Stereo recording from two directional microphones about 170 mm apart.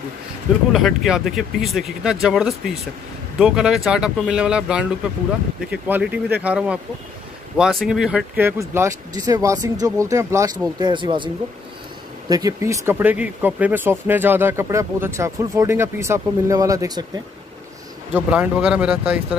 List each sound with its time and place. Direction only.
0.7 s speech: centre (ahead or behind); by 11.2 s 30° right (ahead or behind)
12.3 s speech: 20° right (ahead or behind)
18.1 s speech: 10° right (ahead or behind)